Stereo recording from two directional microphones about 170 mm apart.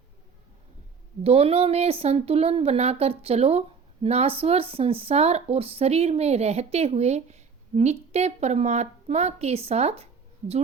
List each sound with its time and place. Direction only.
1.2 s speech: 35° right (ahead or behind)